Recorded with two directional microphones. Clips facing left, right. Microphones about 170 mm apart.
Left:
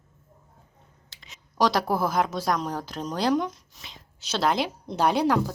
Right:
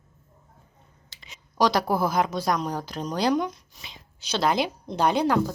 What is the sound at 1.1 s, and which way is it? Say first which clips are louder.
A woman's voice: right 3 dB; centre (ahead or behind).